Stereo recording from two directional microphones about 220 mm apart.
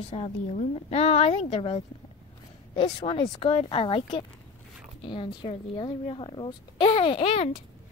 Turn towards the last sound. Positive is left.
turn(degrees=25)  # may be behind; listen again after turning